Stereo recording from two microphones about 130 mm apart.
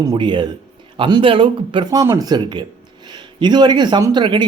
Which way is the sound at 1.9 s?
25° right (ahead or behind).